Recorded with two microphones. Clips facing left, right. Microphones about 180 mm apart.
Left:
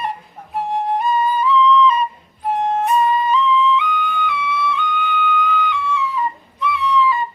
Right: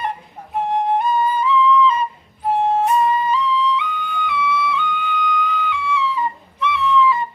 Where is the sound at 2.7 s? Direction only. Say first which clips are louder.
Left 2 dB; 30° right (ahead or behind).